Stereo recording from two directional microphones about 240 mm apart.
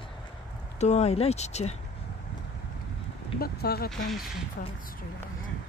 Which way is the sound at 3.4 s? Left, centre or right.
Left.